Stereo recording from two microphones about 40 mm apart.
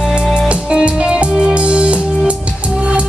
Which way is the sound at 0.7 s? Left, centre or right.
Right.